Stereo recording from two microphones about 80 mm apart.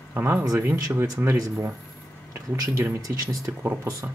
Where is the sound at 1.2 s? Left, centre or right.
Right.